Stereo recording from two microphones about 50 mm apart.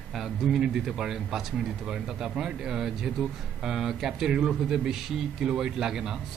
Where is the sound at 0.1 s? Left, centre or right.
Centre.